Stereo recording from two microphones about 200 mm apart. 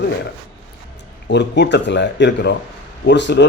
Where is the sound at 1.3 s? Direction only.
60° left (ahead or behind).